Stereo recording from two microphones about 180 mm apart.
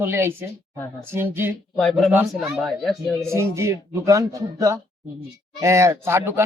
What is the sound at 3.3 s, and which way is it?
A woman's voice, 15° right (ahead or behind).